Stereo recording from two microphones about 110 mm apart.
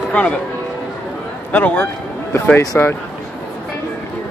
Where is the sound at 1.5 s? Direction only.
15° left (ahead or behind).